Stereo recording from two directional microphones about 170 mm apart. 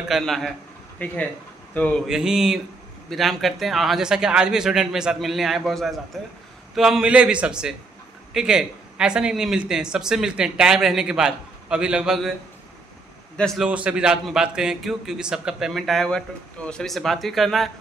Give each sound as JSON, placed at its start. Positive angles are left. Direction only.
{"t": 0.1, "sound": "a man's voice", "side_deg": 0}
{"t": 2.0, "sound": "a man's voice", "side_deg": -5}
{"t": 13.4, "sound": "a man's voice", "side_deg": -5}